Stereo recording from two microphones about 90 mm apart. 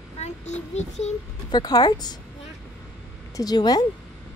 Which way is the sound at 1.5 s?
50° left (ahead or behind).